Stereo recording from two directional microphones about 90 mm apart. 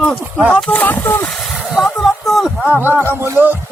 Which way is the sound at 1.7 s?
Centre (ahead or behind).